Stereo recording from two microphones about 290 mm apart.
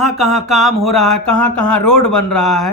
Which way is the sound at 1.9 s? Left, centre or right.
Left.